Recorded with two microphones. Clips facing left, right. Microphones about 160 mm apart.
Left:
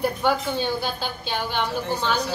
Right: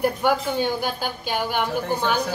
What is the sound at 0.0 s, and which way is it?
A woman's voice, 10° right (ahead or behind).